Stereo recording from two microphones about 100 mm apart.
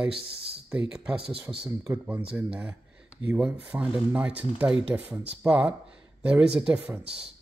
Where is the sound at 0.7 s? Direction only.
10° right (ahead or behind).